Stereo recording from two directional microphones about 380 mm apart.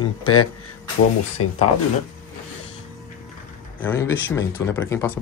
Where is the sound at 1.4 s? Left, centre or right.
Left.